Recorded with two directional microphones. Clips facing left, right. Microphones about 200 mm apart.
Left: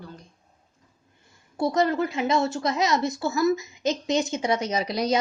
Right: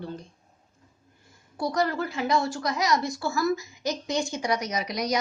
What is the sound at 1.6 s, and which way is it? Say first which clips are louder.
A woman's voice: left 4 dB; 20° left (ahead or behind).